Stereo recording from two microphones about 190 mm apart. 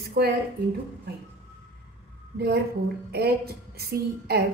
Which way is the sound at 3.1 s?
55° right (ahead or behind).